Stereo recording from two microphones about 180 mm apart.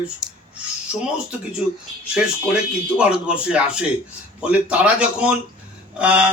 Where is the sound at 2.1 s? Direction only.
5° right (ahead or behind).